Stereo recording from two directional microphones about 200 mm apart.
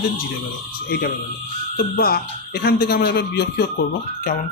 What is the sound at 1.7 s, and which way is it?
Speech, 50° left (ahead or behind).